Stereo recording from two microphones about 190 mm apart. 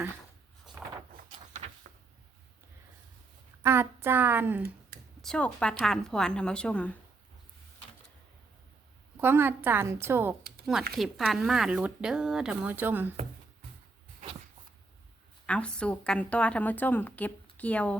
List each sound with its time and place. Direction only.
1.1 s vehicle: 45° right (ahead or behind)
3.6 s a woman's voice: 15° right (ahead or behind)
5.2 s speech: 5° left (ahead or behind)
9.2 s a woman's voice: 10° right (ahead or behind)
10.9 s speech: centre (ahead or behind)
15.4 s a woman's voice: 5° left (ahead or behind)